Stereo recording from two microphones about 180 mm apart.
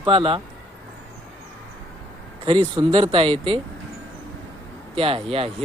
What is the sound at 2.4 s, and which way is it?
Speech, 30° right (ahead or behind).